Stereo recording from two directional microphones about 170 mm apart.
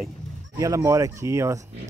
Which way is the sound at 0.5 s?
20° right (ahead or behind).